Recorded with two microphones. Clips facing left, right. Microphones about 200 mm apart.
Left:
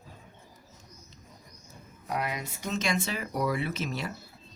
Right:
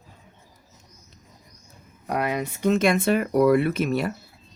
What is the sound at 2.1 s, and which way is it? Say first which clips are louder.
Speech: right 7 dB; 60° right (ahead or behind).